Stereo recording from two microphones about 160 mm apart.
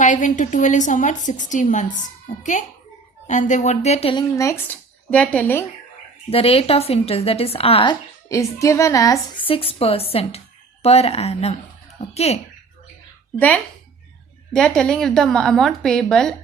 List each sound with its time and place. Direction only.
0.0 s a woman's voice: 50° left (ahead or behind)
4.1 s speech: 20° left (ahead or behind)
6.3 s a woman's voice: 35° left (ahead or behind)
8.3 s a woman's voice: 20° left (ahead or behind)
9.5 s a woman's voice: 35° left (ahead or behind)
14.5 s a woman's voice: 5° left (ahead or behind)